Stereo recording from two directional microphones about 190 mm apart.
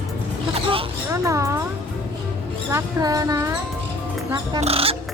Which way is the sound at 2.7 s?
15° right (ahead or behind).